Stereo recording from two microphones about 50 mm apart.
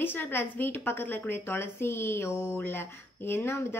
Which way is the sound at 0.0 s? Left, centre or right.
Left.